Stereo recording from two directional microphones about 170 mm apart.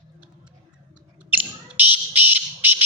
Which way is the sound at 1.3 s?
10° right (ahead or behind).